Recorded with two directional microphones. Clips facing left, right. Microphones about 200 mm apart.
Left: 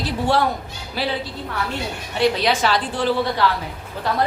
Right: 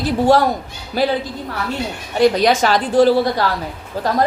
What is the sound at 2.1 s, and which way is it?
A woman's voice, 45° right (ahead or behind).